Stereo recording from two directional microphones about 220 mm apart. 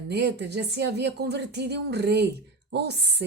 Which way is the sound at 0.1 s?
50° right (ahead or behind).